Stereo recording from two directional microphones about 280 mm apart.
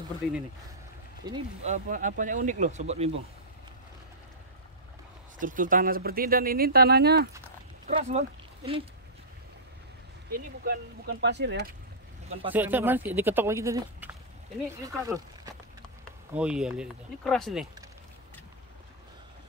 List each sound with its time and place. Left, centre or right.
1.2 s speech: centre
5.4 s speech: right
7.8 s speech: right
10.3 s speech: right
12.4 s speech: centre
15.0 s a sound: centre
16.3 s speech: centre